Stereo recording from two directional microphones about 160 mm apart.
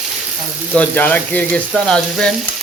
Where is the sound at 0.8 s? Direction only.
10° left (ahead or behind).